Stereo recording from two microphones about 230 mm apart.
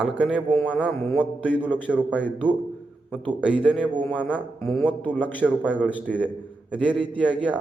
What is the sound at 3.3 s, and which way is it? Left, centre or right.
A man's voice, centre.